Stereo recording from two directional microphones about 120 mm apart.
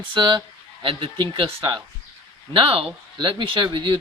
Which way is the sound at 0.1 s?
40° right (ahead or behind).